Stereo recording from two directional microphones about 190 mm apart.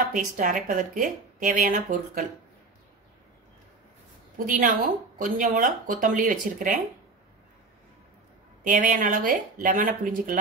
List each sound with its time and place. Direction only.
0.1 s speech: 45° right (ahead or behind)
4.5 s speech: 45° right (ahead or behind)
8.6 s speech: 45° right (ahead or behind)